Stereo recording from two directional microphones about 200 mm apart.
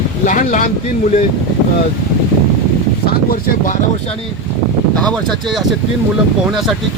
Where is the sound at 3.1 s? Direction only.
50° left (ahead or behind).